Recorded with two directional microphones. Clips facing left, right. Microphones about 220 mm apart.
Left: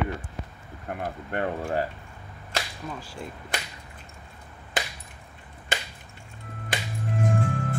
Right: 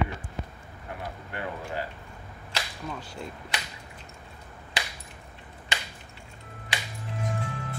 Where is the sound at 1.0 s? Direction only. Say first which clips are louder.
Left 8 dB; 45° left (ahead or behind).